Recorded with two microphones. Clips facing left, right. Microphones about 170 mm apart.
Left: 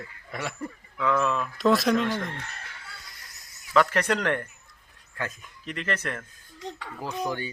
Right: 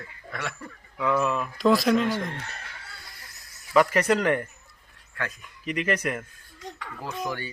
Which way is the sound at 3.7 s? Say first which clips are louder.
Right 2 dB; 10° right (ahead or behind).